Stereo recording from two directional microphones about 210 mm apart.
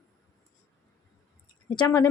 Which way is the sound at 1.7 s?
20° left (ahead or behind).